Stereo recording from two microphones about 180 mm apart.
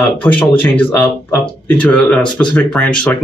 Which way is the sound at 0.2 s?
10° left (ahead or behind).